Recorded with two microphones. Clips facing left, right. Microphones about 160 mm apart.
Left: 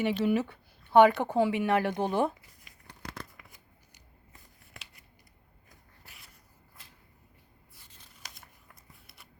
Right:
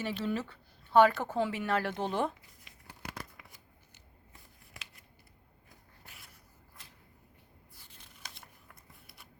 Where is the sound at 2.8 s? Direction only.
10° right (ahead or behind).